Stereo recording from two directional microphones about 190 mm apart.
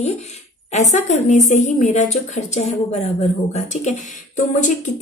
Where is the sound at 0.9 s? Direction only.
40° left (ahead or behind).